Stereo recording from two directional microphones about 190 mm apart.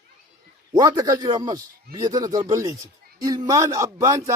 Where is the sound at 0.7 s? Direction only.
20° right (ahead or behind).